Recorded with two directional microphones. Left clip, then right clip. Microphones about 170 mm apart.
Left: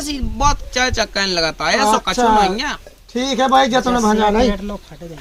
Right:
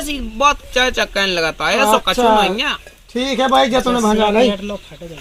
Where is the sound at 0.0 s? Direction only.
20° left (ahead or behind).